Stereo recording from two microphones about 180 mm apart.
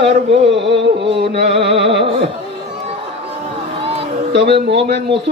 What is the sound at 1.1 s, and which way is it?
Speech, 65° right (ahead or behind).